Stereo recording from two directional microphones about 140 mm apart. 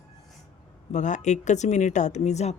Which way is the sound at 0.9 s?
60° left (ahead or behind).